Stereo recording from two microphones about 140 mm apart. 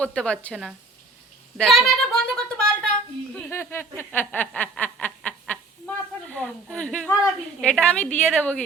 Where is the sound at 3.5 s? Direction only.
15° left (ahead or behind).